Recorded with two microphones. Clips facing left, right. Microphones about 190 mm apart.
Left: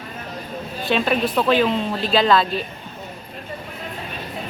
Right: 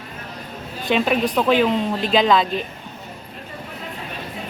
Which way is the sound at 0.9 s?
10° right (ahead or behind).